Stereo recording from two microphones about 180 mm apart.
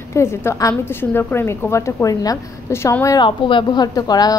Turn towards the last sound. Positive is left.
turn(degrees=20)  # may be behind; listen again after turning